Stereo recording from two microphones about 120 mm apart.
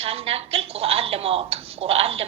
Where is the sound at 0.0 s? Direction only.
55° right (ahead or behind).